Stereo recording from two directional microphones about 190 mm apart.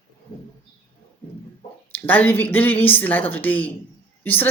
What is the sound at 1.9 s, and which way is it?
A woman's voice, 10° left (ahead or behind).